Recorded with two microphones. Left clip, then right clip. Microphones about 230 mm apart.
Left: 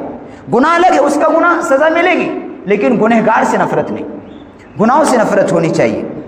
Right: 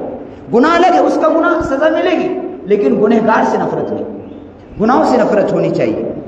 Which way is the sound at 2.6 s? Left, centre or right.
Left.